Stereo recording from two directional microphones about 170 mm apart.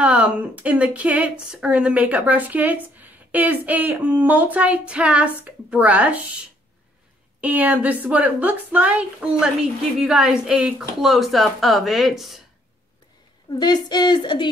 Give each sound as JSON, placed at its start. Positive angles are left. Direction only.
{"t": 0.0, "sound": "speech", "side_deg": -5}
{"t": 7.3, "sound": "a woman's voice", "side_deg": -10}
{"t": 13.6, "sound": "speech", "side_deg": 25}